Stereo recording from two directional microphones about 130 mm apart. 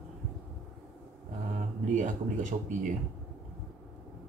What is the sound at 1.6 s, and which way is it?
Speech, 70° right (ahead or behind).